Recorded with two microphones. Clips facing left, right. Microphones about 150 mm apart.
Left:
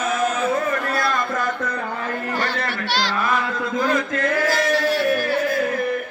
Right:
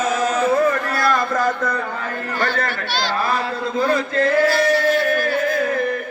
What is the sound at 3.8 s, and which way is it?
Chant, 30° right (ahead or behind).